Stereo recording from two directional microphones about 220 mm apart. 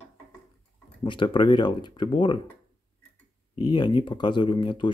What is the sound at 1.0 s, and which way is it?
Speech, 20° left (ahead or behind).